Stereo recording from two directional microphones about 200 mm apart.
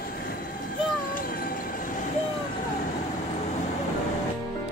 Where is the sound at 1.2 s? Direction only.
45° left (ahead or behind).